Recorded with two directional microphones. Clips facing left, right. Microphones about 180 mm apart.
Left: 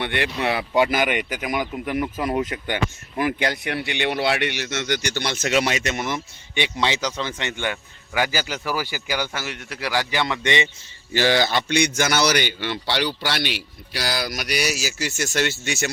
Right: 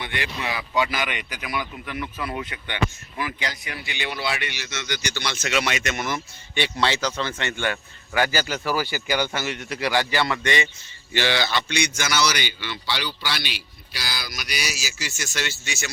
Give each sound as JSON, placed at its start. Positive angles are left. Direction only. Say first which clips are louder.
{"t": 0.0, "sound": "speech", "louder": "left 6 dB", "side_deg": 60}
{"t": 11.1, "sound": "a man's voice", "louder": "left 4 dB", "side_deg": 45}